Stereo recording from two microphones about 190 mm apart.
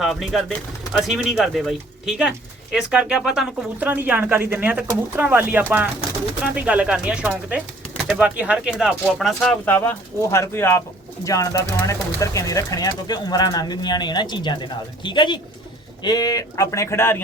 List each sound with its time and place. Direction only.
0.0 s speech: centre (ahead or behind)